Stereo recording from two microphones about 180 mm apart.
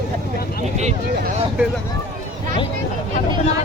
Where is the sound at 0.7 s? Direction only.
40° right (ahead or behind).